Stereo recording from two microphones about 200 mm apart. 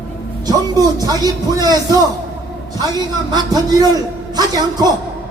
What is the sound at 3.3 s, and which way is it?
A man's voice, 20° right (ahead or behind).